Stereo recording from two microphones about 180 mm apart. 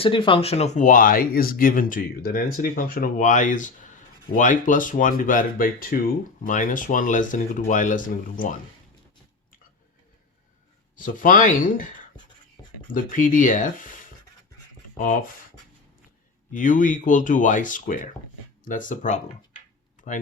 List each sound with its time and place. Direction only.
0.0 s speech: 30° left (ahead or behind); by 8.5 s 50° left (ahead or behind)
10.9 s speech: 50° left (ahead or behind)
12.9 s speech: 50° left (ahead or behind)
16.5 s speech: 45° left (ahead or behind)
20.0 s a sound: 45° left (ahead or behind)